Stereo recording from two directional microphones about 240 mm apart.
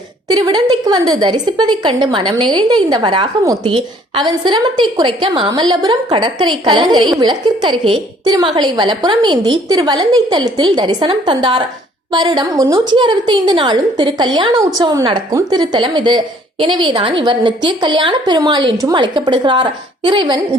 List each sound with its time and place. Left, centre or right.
0.3 s a woman's voice: centre